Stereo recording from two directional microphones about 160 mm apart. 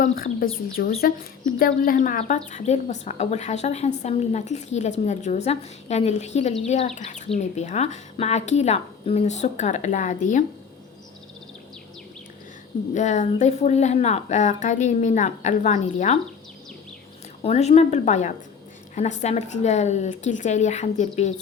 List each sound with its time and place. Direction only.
0.0 s a woman's voice: 65° left (ahead or behind)
12.9 s a woman's voice: 45° left (ahead or behind)
17.4 s a woman's voice: 40° left (ahead or behind)